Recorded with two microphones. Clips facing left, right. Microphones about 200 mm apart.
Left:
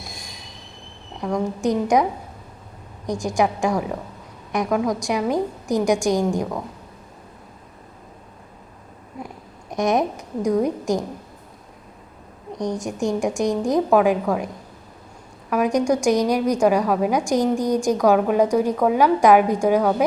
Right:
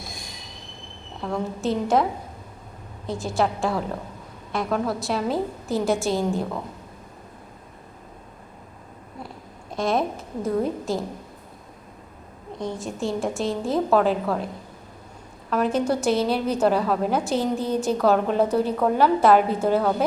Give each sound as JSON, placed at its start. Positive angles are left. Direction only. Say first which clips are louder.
{"t": 1.2, "sound": "a woman's voice", "louder": "left 4 dB", "side_deg": 15}
{"t": 3.1, "sound": "a woman's voice", "louder": "left 3 dB", "side_deg": 15}
{"t": 9.6, "sound": "a woman's voice", "louder": "left 3 dB", "side_deg": 20}
{"t": 12.5, "sound": "a woman's voice", "louder": "left 4 dB", "side_deg": 15}